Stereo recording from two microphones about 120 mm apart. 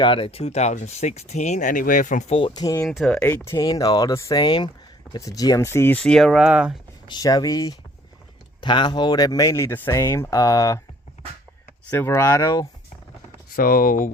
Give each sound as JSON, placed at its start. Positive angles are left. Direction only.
{"t": 0.0, "sound": "speech", "side_deg": 45}
{"t": 2.5, "sound": "speech", "side_deg": 30}
{"t": 2.8, "sound": "speech", "side_deg": 0}
{"t": 3.2, "sound": "speech", "side_deg": 20}
{"t": 3.6, "sound": "speech", "side_deg": 30}
{"t": 6.0, "sound": "speech", "side_deg": 5}
{"t": 7.1, "sound": "speech", "side_deg": 35}
{"t": 11.9, "sound": "speech", "side_deg": 20}